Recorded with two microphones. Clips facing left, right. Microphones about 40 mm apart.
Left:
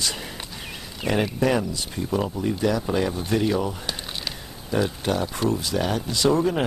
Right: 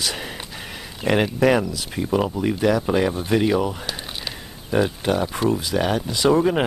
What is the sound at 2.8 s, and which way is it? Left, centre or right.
Speech, right.